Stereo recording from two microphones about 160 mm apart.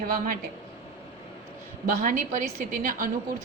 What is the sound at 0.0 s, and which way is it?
Speech, 65° right (ahead or behind).